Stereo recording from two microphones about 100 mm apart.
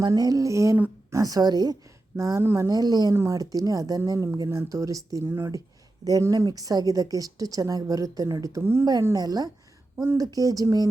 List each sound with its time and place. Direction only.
0.0 s a woman's voice: 40° right (ahead or behind)
2.4 s speech: 25° right (ahead or behind)
2.6 s a woman's voice: 40° right (ahead or behind)
9.1 s a woman's voice: 40° right (ahead or behind)